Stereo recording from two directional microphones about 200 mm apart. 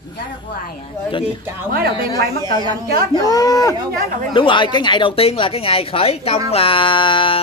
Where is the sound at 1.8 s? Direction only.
50° right (ahead or behind).